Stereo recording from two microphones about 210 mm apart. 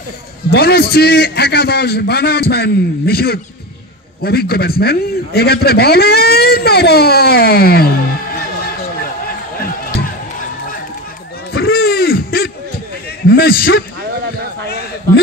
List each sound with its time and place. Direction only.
0.5 s a man's voice: 50° left (ahead or behind)
11.5 s a sound: 45° left (ahead or behind)
13.3 s a man's voice: 45° left (ahead or behind)